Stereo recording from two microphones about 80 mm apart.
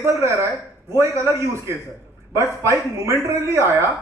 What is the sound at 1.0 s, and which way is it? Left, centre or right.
Speech, right.